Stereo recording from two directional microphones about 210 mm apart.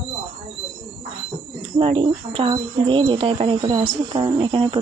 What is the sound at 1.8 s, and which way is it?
Speech, 25° right (ahead or behind).